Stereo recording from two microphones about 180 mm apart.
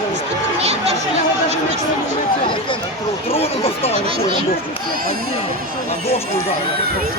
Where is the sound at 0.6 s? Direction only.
35° right (ahead or behind).